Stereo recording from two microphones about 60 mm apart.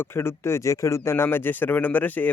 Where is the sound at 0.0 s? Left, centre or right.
Left.